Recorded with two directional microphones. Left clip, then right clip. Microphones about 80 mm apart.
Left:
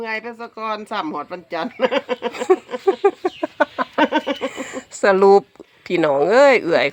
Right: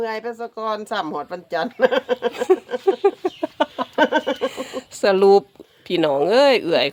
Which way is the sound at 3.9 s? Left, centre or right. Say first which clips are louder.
Right 1 dB; right.